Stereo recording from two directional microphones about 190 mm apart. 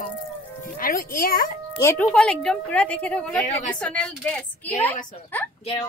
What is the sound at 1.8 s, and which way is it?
A woman's voice, 15° left (ahead or behind).